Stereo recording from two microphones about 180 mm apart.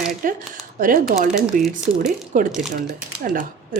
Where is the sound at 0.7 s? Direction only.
50° right (ahead or behind).